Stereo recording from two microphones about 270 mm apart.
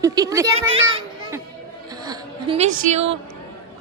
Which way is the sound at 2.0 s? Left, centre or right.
Centre.